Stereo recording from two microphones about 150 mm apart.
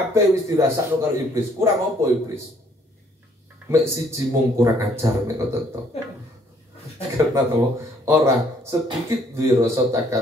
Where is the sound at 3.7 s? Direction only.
20° right (ahead or behind).